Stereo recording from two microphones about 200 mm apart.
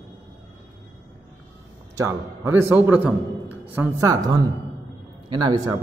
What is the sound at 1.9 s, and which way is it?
A man's voice, 15° right (ahead or behind).